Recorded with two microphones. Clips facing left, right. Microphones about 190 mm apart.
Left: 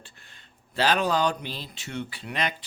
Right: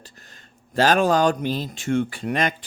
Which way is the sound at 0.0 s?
40° right (ahead or behind).